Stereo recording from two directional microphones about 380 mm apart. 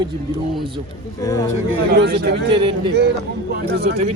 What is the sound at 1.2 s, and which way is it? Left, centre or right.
Speech, centre.